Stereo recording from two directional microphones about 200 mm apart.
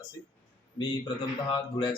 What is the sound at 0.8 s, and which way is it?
Speech, 25° left (ahead or behind).